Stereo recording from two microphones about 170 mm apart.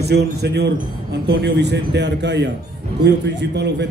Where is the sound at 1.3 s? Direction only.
85° right.